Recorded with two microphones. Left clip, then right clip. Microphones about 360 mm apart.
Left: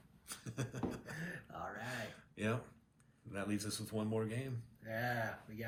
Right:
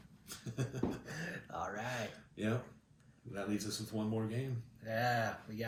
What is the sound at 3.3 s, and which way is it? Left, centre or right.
Speech, centre.